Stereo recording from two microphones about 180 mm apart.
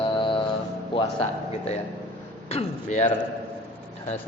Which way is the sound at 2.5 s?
35° left (ahead or behind).